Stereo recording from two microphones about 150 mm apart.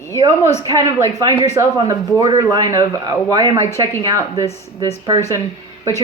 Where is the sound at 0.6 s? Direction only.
25° right (ahead or behind).